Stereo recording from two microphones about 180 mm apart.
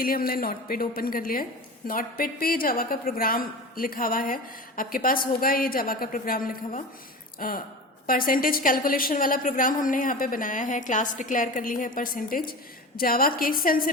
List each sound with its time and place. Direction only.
0.0 s a woman's voice: 55° left (ahead or behind)